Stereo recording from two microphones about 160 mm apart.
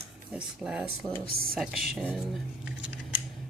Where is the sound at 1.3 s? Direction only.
70° right (ahead or behind).